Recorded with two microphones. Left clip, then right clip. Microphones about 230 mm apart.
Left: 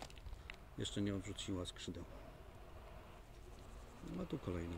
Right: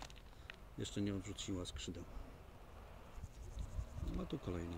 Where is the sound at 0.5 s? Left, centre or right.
Centre.